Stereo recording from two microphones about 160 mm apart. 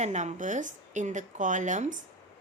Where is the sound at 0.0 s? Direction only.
45° right (ahead or behind).